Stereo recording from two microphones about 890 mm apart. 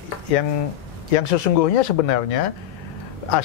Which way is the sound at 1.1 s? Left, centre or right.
Left.